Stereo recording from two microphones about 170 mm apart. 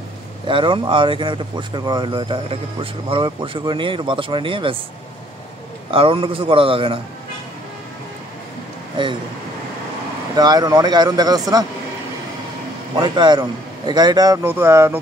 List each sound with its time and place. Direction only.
0.5 s speech: 30° right (ahead or behind)
5.9 s a man's voice: 30° right (ahead or behind)
10.3 s speech: 25° right (ahead or behind)
13.0 s speech: 25° right (ahead or behind)